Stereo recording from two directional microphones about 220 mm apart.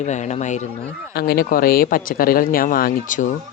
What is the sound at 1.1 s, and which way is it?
Speech, 45° left (ahead or behind).